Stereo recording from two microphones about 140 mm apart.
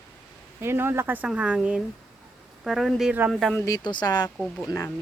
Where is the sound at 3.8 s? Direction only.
30° left (ahead or behind).